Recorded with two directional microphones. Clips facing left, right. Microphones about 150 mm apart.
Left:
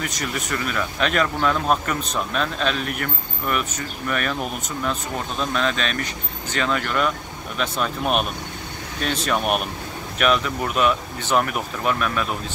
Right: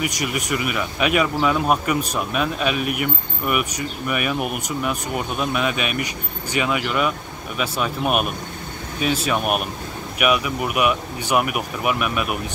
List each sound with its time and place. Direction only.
0.0 s speech: 10° right (ahead or behind)